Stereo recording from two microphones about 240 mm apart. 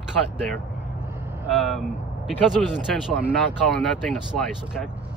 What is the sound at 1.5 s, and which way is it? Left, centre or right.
Speech, centre.